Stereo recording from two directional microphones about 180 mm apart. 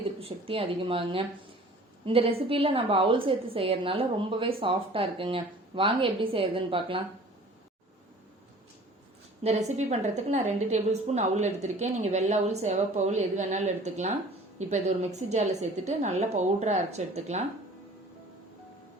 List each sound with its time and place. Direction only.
0.2 s a woman's voice: 30° right (ahead or behind)
9.4 s a woman's voice: 35° right (ahead or behind)